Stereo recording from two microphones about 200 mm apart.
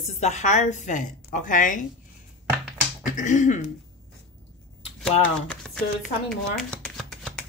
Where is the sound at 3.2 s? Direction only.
40° left (ahead or behind).